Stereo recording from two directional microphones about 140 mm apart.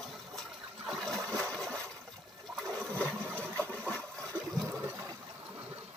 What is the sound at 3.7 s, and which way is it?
Toilet flush, 10° left (ahead or behind).